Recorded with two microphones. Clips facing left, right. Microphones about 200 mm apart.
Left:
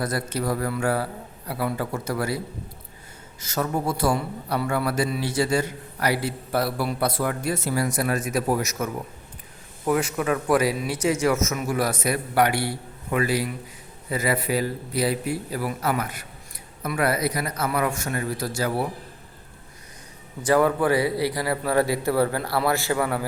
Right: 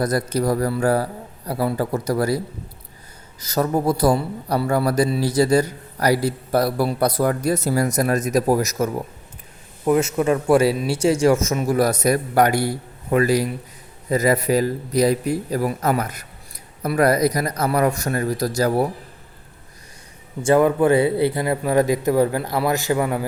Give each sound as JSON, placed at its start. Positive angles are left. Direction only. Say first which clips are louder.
{"t": 0.0, "sound": "a man's voice", "louder": "right 6 dB", "side_deg": -40}
{"t": 3.4, "sound": "a man's voice", "louder": "right 6 dB", "side_deg": -35}
{"t": 9.8, "sound": "a man's voice", "louder": "right 5 dB", "side_deg": -25}
{"t": 20.4, "sound": "a man's voice", "louder": "right 4 dB", "side_deg": -20}